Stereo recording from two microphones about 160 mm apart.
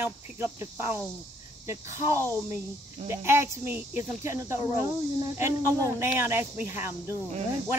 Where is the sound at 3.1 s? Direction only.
15° right (ahead or behind).